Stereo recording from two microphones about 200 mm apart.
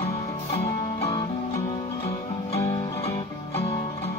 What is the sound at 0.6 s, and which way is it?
Music, 25° left (ahead or behind).